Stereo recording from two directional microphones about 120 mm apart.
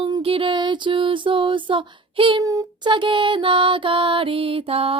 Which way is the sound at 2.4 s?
30° right (ahead or behind).